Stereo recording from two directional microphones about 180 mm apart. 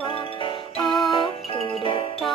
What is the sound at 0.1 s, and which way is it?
Music, 25° left (ahead or behind).